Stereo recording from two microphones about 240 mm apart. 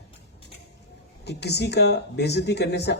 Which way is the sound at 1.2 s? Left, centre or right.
Left.